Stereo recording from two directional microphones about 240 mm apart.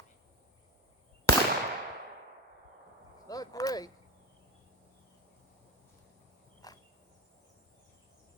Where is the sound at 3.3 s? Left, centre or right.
Centre.